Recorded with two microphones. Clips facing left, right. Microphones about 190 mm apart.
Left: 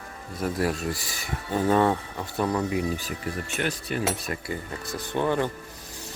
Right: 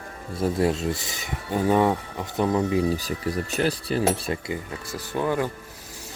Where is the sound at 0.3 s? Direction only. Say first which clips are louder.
Right 4 dB; 25° right (ahead or behind).